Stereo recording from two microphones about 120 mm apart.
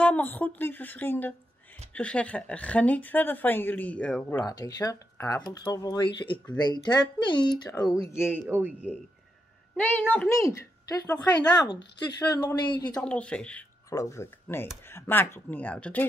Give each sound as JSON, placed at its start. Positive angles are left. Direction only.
{"t": 0.0, "sound": "a woman's voice", "side_deg": 15}
{"t": 4.4, "sound": "speech", "side_deg": 30}
{"t": 8.5, "sound": "a man's voice", "side_deg": -15}
{"t": 9.8, "sound": "speech", "side_deg": 15}
{"t": 13.0, "sound": "a woman's voice", "side_deg": 10}
{"t": 13.8, "sound": "speech", "side_deg": 25}